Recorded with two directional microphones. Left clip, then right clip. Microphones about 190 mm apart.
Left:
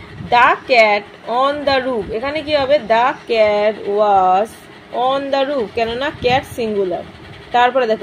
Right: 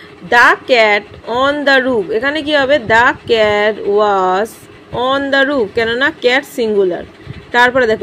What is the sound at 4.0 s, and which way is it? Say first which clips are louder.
A woman's voice: left 1 dB; 50° right (ahead or behind).